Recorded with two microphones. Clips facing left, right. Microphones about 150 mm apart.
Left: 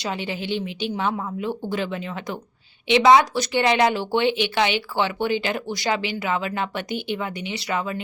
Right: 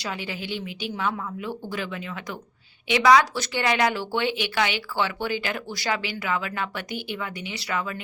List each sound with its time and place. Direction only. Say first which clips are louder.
0.0 s speech: left 4 dB; 25° left (ahead or behind)